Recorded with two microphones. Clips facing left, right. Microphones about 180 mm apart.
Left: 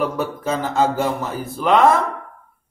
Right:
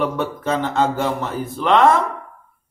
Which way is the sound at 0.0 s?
5° left (ahead or behind).